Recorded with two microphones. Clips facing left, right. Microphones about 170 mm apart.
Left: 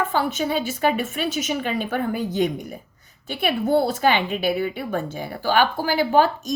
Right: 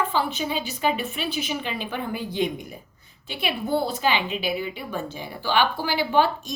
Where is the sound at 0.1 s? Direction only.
50° left (ahead or behind).